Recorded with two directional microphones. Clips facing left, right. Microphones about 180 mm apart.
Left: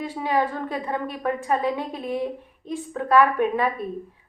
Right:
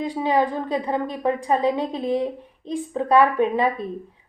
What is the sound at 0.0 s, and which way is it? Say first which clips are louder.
A woman's voice: right 3 dB; 20° right (ahead or behind).